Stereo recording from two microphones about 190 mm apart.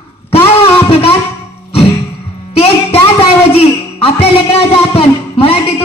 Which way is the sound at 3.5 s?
30° left (ahead or behind).